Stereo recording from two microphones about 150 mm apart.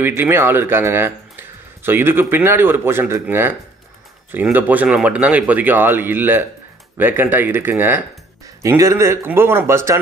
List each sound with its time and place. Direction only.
0.0 s speech: 15° right (ahead or behind)